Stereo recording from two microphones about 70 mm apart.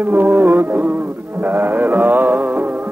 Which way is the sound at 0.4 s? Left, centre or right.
Right.